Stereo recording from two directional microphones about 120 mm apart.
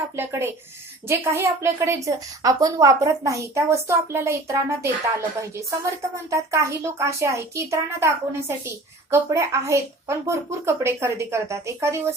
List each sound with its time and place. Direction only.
0.2 s a child's voice: 20° right (ahead or behind)
6.3 s a child's voice: 25° right (ahead or behind)